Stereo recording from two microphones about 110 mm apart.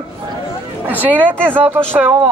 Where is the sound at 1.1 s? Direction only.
10° left (ahead or behind).